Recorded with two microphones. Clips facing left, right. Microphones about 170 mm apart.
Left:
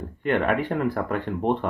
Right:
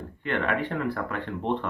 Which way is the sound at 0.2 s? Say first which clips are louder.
Left 5 dB; 50° left (ahead or behind).